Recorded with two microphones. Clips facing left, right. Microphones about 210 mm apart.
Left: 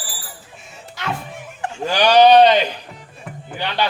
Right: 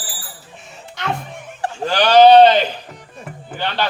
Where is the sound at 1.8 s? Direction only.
15° left (ahead or behind).